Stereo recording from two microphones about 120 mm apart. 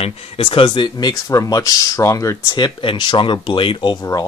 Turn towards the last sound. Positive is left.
turn(degrees=45)  # may be behind; listen again after turning